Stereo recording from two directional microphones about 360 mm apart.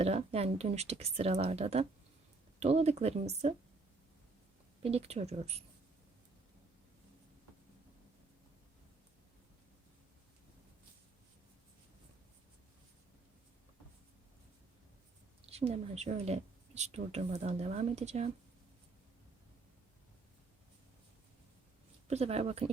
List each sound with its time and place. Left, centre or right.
0.0 s speech: centre
4.8 s speech: centre
15.4 s speech: centre
22.0 s speech: centre